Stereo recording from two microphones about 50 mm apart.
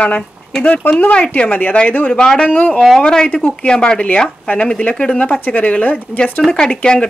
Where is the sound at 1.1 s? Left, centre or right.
Left.